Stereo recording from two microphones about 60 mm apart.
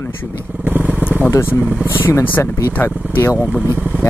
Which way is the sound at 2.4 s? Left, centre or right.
Left.